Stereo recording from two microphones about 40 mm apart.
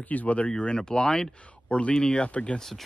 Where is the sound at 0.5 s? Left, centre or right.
Left.